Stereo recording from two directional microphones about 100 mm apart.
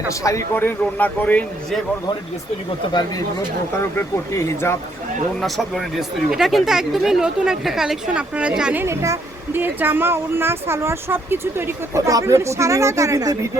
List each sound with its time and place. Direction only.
0.1 s a man's voice: 30° left (ahead or behind)
0.5 s speech: 20° left (ahead or behind)
2.9 s speech: 45° left (ahead or behind)
3.9 s speech: 30° left (ahead or behind)
5.4 s speech: centre (ahead or behind)
8.8 s speech: 30° right (ahead or behind)